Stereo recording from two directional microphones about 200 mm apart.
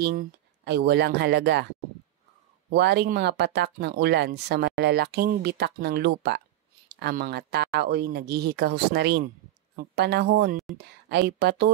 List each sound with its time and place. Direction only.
0.0 s speech: 50° right (ahead or behind)
2.7 s speech: 55° right (ahead or behind)